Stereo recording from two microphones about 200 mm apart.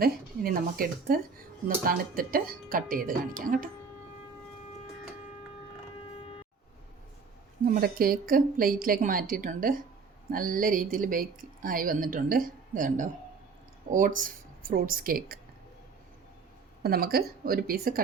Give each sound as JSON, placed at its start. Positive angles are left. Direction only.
{"t": 0.0, "sound": "speech", "side_deg": -45}
{"t": 7.6, "sound": "speech", "side_deg": -45}
{"t": 16.8, "sound": "speech", "side_deg": -50}